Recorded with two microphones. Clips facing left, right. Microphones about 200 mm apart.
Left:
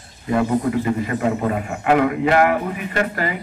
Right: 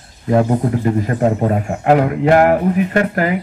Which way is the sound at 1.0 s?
45° right (ahead or behind).